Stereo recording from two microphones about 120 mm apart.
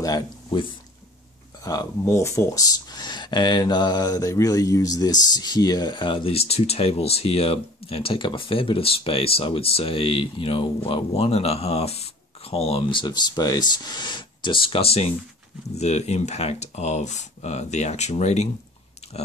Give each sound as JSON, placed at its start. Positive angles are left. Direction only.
{"t": 0.0, "sound": "speech", "side_deg": 30}
{"t": 1.6, "sound": "speech", "side_deg": 30}
{"t": 13.0, "sound": "speech", "side_deg": 35}
{"t": 15.7, "sound": "speech", "side_deg": 65}